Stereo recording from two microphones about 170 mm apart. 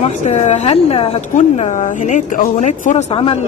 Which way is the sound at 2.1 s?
45° left (ahead or behind).